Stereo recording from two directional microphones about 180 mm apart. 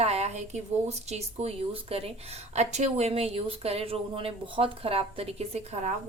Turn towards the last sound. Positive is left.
turn(degrees=-35)  # may be behind; listen again after turning